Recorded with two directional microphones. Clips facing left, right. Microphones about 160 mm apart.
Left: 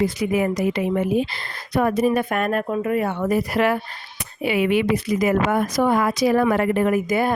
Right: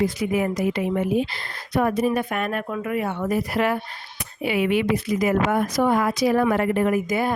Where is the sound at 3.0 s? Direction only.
80° left.